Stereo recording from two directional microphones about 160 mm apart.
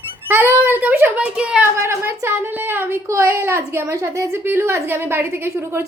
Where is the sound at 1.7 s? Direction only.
15° right (ahead or behind).